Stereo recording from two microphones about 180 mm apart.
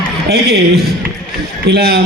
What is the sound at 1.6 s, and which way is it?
Speech, 65° right (ahead or behind).